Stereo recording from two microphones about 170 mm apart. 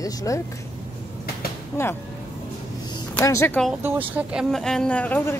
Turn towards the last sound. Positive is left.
turn(degrees=10)  # may be behind; listen again after turning